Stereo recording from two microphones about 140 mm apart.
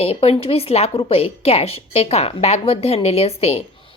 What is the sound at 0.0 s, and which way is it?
A woman's voice, 45° left (ahead or behind).